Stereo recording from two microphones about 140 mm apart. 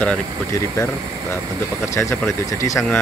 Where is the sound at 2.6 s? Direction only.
20° left (ahead or behind).